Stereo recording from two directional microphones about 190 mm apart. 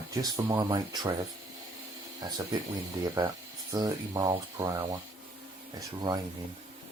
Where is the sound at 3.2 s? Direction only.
20° right (ahead or behind).